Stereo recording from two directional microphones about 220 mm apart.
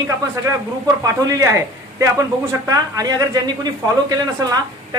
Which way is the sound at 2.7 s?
15° right (ahead or behind).